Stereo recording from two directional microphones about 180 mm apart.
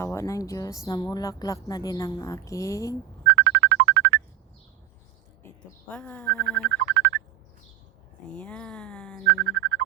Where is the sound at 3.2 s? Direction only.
75° right (ahead or behind).